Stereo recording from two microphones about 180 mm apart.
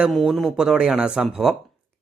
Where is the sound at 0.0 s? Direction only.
Centre (ahead or behind).